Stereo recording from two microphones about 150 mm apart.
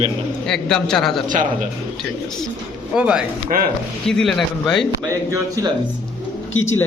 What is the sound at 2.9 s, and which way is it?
A man's voice, 5° right (ahead or behind).